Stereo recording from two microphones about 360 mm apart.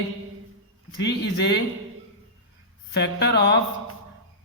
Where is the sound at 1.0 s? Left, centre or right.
Left.